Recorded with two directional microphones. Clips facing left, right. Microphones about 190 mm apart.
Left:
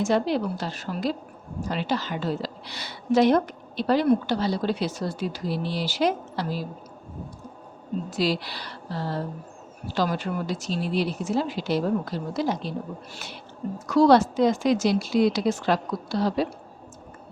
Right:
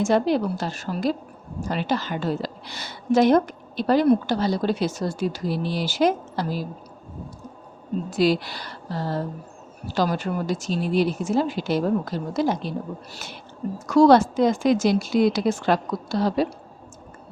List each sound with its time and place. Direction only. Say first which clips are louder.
0.0 s a woman's voice: right 3 dB; 50° right (ahead or behind)
8.1 s a woman's voice: right 6 dB; 50° right (ahead or behind)